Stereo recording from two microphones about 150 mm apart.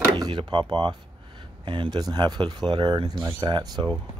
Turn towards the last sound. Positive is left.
turn(degrees=-30)  # may be behind; listen again after turning